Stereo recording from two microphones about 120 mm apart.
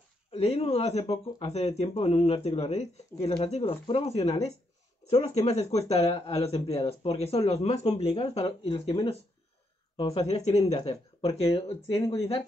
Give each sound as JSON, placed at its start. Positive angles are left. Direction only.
{"t": 0.3, "sound": "speech", "side_deg": 55}
{"t": 10.1, "sound": "speech", "side_deg": 60}